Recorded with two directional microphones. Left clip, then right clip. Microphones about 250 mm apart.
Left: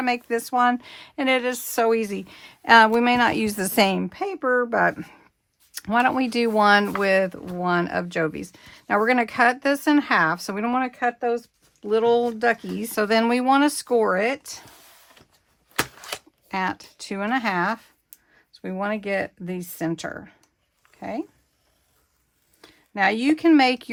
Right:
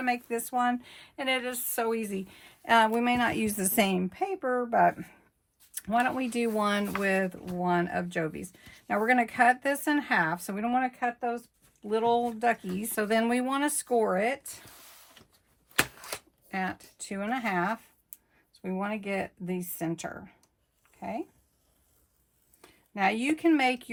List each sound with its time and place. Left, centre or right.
0.0 s speech: left
15.7 s a sound: centre
16.5 s speech: left
22.6 s speech: left